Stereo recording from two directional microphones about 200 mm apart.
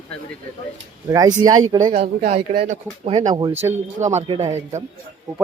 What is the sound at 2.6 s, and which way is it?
Speech, 30° right (ahead or behind).